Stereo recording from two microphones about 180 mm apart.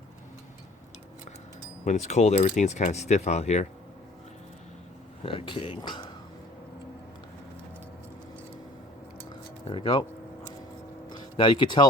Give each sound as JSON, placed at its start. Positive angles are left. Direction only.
{"t": 1.8, "sound": "speech", "side_deg": 40}
{"t": 5.2, "sound": "speech", "side_deg": 30}
{"t": 9.6, "sound": "speech", "side_deg": 25}
{"t": 11.1, "sound": "speech", "side_deg": 25}